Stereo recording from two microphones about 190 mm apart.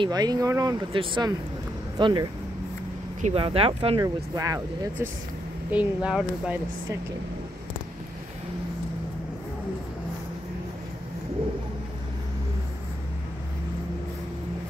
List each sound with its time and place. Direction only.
0.0 s speech: 20° right (ahead or behind)
4.0 s speech: 15° right (ahead or behind)
5.7 s speech: 5° right (ahead or behind)